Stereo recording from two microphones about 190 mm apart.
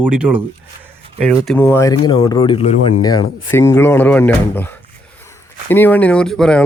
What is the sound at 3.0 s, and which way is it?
Speech, 20° left (ahead or behind).